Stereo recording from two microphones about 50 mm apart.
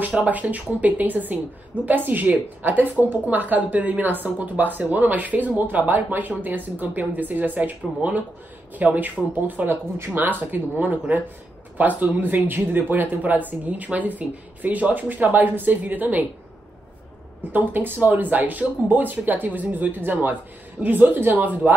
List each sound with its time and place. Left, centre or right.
0.0 s a woman's voice: right
17.5 s a woman's voice: right